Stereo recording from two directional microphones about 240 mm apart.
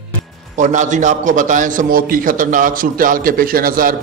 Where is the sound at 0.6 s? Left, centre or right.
Right.